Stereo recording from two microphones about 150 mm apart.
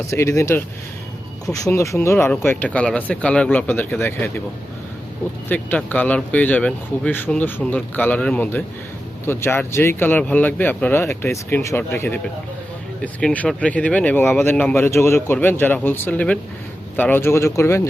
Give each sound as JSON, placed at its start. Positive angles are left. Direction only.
{"t": 0.1, "sound": "speech", "side_deg": 20}
{"t": 5.5, "sound": "speech", "side_deg": 10}